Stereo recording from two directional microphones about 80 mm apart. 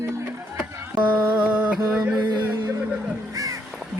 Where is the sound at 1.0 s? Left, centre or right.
Centre.